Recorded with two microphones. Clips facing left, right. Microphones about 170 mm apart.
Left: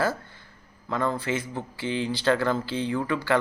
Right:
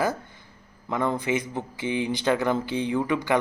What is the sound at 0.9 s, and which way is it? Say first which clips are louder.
Speech: right 2 dB; 20° right (ahead or behind).